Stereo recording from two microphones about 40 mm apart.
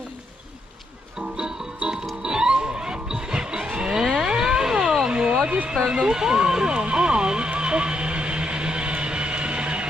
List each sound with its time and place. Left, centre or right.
2.2 s music: centre
3.9 s vehicle: centre
5.9 s music: centre